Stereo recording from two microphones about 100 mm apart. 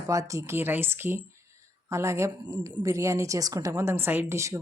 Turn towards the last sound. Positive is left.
turn(degrees=-30)  # may be behind; listen again after turning